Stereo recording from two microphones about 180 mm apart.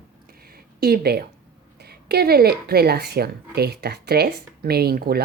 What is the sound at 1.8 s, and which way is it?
Speech, 60° right (ahead or behind).